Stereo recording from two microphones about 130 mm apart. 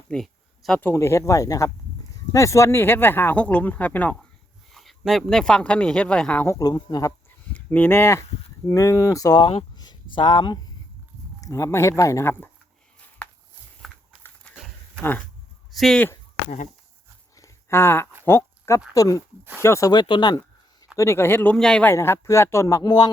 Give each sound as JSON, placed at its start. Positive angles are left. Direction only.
{"t": 0.1, "sound": "a sound", "side_deg": 5}
{"t": 0.8, "sound": "speech", "side_deg": 20}
{"t": 6.6, "sound": "speech", "side_deg": 30}
{"t": 7.5, "sound": "speech", "side_deg": 15}
{"t": 13.2, "sound": "a sound", "side_deg": 10}
{"t": 15.7, "sound": "speech", "side_deg": 0}
{"t": 17.3, "sound": "a sound", "side_deg": 20}
{"t": 18.9, "sound": "speech", "side_deg": 25}
{"t": 19.9, "sound": "speech", "side_deg": 35}
{"t": 20.9, "sound": "speech", "side_deg": 20}
{"t": 21.5, "sound": "speech", "side_deg": 5}
{"t": 21.9, "sound": "speech", "side_deg": 20}